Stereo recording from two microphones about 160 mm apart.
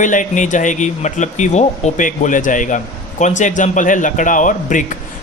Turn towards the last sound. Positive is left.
turn(degrees=55)  # may be behind; listen again after turning